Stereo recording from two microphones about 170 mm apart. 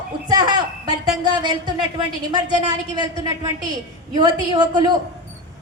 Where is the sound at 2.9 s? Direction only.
25° right (ahead or behind).